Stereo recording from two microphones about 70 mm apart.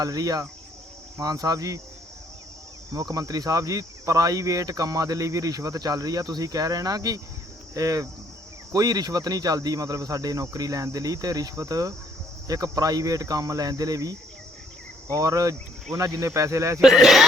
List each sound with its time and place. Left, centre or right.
0.0 s speech: right
2.9 s speech: right
16.8 s speech: centre